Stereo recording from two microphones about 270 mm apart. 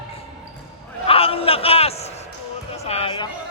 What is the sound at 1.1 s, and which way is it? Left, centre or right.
A man's voice, left.